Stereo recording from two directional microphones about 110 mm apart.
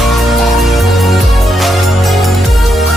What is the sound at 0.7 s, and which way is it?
Music, centre (ahead or behind).